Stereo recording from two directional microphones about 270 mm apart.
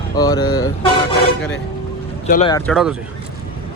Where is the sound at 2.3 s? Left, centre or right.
Left.